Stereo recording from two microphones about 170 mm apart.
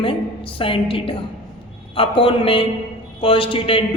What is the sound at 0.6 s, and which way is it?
A woman's voice, 30° left (ahead or behind).